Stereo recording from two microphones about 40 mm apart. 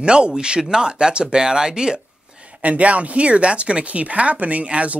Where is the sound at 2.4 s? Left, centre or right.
Right.